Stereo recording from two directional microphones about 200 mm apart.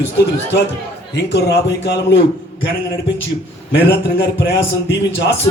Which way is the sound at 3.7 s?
65° left (ahead or behind).